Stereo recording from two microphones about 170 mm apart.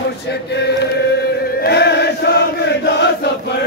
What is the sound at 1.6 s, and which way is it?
Chant, 75° left (ahead or behind).